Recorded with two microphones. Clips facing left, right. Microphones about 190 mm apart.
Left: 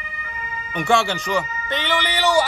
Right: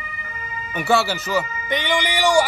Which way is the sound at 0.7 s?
5° right (ahead or behind).